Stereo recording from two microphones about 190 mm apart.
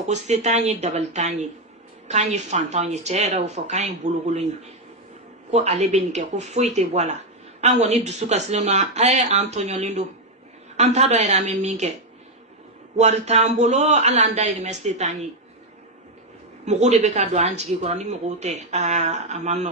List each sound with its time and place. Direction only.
0.0 s speech: 35° right (ahead or behind)
5.5 s speech: 35° right (ahead or behind)
16.6 s speech: 35° right (ahead or behind)